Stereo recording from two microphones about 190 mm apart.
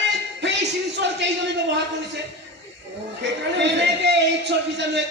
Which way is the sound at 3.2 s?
65° right (ahead or behind).